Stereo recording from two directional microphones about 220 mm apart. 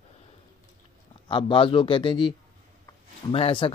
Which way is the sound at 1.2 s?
20° left (ahead or behind).